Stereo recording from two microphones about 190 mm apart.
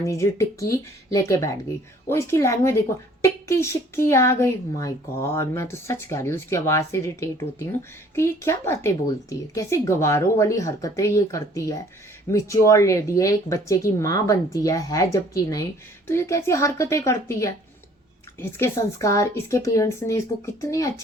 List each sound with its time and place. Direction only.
0.0 s a woman's voice: 15° left (ahead or behind)